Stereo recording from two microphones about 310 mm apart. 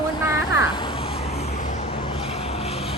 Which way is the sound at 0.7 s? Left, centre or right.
Centre.